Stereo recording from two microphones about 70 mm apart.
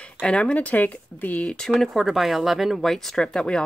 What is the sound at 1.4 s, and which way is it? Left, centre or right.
Speech, centre.